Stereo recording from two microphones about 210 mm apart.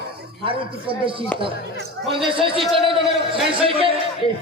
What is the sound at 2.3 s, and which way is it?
A man's voice, 25° right (ahead or behind).